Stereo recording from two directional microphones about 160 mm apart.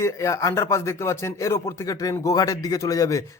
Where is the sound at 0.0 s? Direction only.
20° left (ahead or behind).